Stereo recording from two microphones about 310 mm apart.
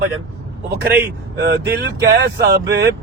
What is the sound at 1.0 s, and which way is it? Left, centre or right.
Speech, right.